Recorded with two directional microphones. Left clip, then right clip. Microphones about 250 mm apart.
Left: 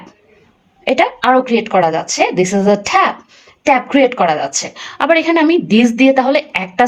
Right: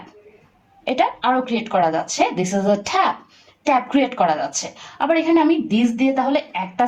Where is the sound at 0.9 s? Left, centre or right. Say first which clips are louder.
Left 6 dB; left.